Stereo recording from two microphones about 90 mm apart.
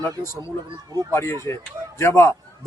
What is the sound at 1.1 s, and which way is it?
A man's voice, 30° left (ahead or behind).